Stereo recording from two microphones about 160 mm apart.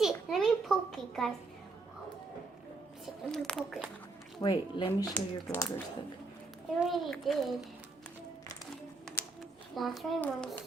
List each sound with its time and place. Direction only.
0.0 s a sound: centre (ahead or behind)
3.3 s a child's voice: centre (ahead or behind)
4.4 s speech: 25° left (ahead or behind)
6.7 s a child's voice: centre (ahead or behind)
9.7 s a child's voice: centre (ahead or behind)